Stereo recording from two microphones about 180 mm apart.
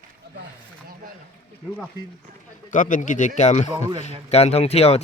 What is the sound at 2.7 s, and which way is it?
Speech, 45° left (ahead or behind).